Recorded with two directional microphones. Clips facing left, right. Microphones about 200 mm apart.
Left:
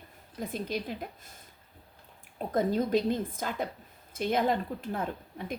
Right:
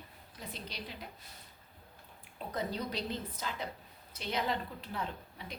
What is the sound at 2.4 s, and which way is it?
A woman's voice, 50° left (ahead or behind).